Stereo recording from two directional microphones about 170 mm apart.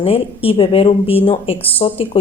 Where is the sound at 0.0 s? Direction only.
35° left (ahead or behind).